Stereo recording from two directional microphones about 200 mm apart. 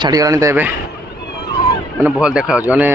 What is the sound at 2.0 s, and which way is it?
Speech, 5° right (ahead or behind).